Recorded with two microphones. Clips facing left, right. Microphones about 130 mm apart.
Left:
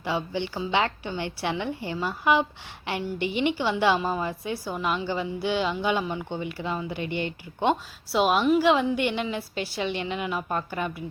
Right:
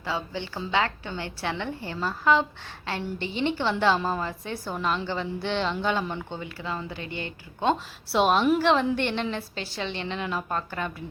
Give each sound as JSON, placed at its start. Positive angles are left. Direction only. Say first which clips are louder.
{"t": 0.0, "sound": "a woman's voice", "louder": "left 3 dB", "side_deg": 15}
{"t": 6.4, "sound": "speech", "louder": "left 3 dB", "side_deg": 20}
{"t": 8.1, "sound": "a woman's voice", "louder": "even", "side_deg": 5}